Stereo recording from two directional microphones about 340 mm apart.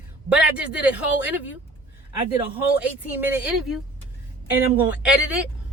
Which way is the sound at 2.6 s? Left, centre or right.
Centre.